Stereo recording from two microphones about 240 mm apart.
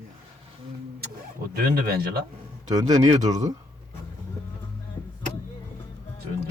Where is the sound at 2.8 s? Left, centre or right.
Centre.